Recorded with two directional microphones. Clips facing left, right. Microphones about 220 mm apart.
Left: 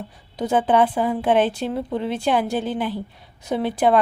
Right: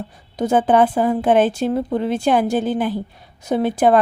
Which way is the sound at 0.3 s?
45° right (ahead or behind).